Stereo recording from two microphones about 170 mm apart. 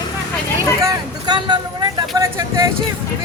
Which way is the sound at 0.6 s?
20° right (ahead or behind).